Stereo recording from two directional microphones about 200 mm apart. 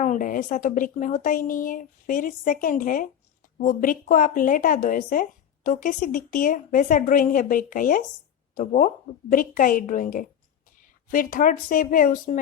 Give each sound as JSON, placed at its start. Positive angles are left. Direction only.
{"t": 0.0, "sound": "a woman's voice", "side_deg": 40}